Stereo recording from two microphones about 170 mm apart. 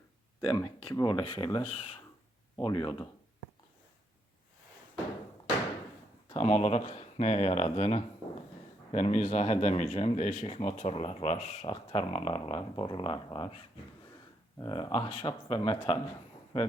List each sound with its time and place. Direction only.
0.4 s speech: 20° left (ahead or behind)
6.3 s speech: 40° left (ahead or behind)
14.6 s speech: 25° left (ahead or behind)